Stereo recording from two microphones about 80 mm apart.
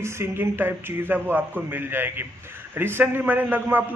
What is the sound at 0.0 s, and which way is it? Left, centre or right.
A man's voice, right.